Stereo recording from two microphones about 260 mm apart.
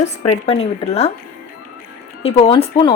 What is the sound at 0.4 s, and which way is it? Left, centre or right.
Speech, left.